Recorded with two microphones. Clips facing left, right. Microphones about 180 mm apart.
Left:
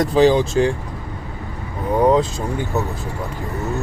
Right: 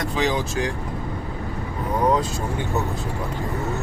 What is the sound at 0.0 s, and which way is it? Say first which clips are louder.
Speech: left 9 dB; 30° left (ahead or behind).